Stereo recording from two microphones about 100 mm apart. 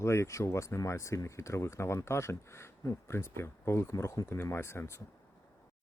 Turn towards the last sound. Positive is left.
turn(degrees=25)  # may be behind; listen again after turning